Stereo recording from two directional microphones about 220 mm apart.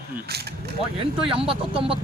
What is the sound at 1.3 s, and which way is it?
Speech, 25° right (ahead or behind).